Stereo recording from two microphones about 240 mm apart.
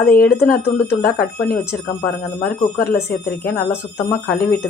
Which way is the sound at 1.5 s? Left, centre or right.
Centre.